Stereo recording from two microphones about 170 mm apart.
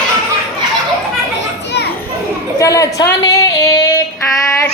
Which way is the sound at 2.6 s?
20° left (ahead or behind).